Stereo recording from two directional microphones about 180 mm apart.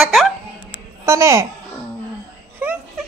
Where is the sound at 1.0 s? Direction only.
15° right (ahead or behind).